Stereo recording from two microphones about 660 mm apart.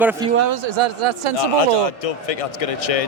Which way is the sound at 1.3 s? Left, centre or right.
Left.